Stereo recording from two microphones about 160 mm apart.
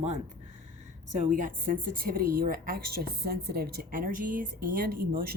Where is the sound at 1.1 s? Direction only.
50° right (ahead or behind).